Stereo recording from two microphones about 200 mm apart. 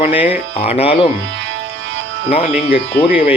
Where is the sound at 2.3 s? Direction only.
30° left (ahead or behind).